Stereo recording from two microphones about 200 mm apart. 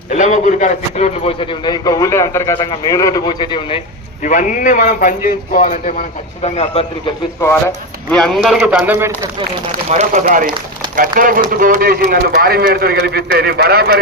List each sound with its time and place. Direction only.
0.1 s a man's voice: 35° left (ahead or behind)
4.2 s a man's voice: 40° left (ahead or behind)
8.1 s a man's voice: 5° left (ahead or behind)
10.0 s a man's voice: 35° right (ahead or behind)